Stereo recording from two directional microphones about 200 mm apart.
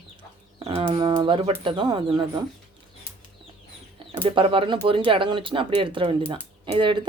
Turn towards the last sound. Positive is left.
turn(degrees=-25)  # may be behind; listen again after turning